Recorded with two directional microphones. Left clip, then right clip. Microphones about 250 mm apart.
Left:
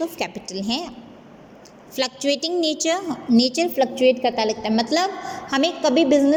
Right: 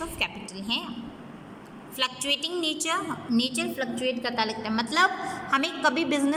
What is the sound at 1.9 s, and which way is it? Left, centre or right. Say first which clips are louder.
A woman's voice: left 5 dB; centre.